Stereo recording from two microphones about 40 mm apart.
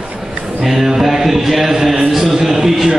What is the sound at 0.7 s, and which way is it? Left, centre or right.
Music, centre.